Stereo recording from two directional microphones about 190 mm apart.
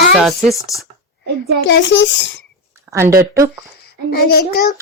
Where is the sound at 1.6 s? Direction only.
70° left (ahead or behind).